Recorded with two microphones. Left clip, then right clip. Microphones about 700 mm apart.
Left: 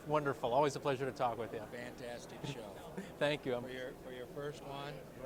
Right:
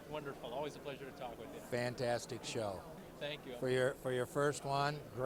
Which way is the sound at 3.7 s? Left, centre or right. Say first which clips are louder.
Right 10 dB; right.